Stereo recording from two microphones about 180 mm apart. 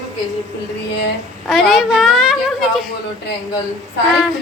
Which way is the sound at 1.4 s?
Centre (ahead or behind).